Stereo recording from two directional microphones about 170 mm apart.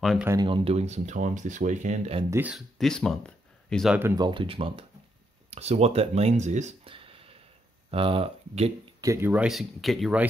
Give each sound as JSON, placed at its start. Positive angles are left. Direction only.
{"t": 0.2, "sound": "speech", "side_deg": -15}
{"t": 0.5, "sound": "speech", "side_deg": -30}
{"t": 2.5, "sound": "speech", "side_deg": 0}
{"t": 4.1, "sound": "speech", "side_deg": -25}
{"t": 9.0, "sound": "speech", "side_deg": -15}